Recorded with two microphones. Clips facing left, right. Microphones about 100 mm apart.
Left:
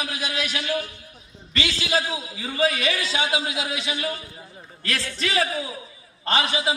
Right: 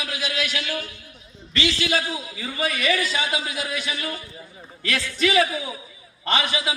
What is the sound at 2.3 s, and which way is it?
A man's voice, 30° left (ahead or behind).